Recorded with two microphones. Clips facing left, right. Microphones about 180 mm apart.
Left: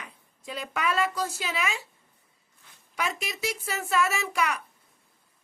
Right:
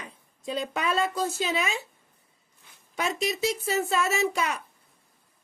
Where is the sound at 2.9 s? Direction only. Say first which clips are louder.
Right 4 dB; 25° right (ahead or behind).